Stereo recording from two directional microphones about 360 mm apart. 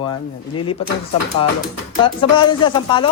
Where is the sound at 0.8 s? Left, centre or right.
Centre.